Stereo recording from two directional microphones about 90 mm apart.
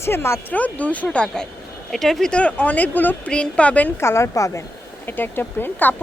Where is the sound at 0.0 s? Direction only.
30° left (ahead or behind).